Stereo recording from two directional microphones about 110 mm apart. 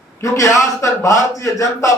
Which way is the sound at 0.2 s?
30° left (ahead or behind).